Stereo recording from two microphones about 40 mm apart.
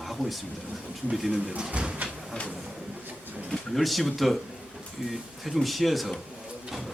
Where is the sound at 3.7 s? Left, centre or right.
Centre.